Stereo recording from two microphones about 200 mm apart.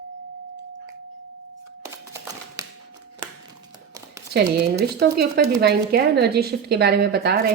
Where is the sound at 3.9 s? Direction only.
15° right (ahead or behind).